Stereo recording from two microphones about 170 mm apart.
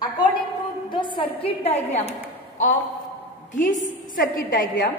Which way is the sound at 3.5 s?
50° left (ahead or behind).